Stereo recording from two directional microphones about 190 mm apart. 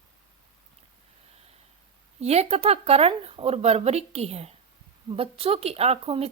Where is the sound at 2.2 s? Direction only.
35° right (ahead or behind).